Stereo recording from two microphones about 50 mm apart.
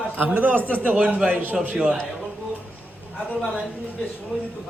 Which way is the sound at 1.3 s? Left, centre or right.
Right.